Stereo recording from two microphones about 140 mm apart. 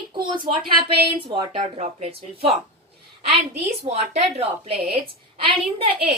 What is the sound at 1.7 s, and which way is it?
Speech, 50° right (ahead or behind).